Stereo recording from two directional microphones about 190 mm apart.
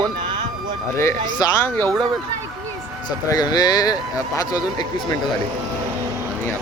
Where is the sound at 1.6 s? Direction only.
10° left (ahead or behind).